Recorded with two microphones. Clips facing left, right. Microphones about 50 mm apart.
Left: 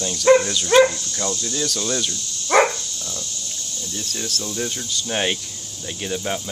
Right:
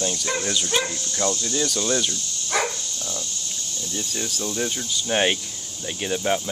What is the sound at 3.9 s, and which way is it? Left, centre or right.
Speech, centre.